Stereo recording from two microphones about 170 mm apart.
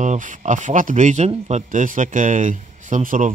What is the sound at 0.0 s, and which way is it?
Speech, 50° right (ahead or behind).